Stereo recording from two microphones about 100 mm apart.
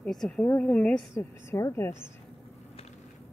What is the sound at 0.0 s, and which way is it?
A woman's voice, 5° left (ahead or behind).